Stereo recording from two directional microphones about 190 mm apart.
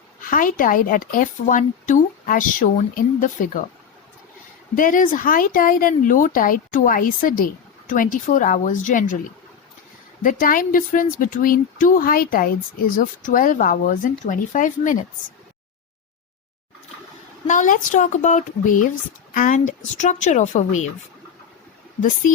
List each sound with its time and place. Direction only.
0.3 s speech: 45° left (ahead or behind)
4.7 s speech: 45° left (ahead or behind)
10.2 s speech: 45° left (ahead or behind)
17.4 s speech: 40° left (ahead or behind)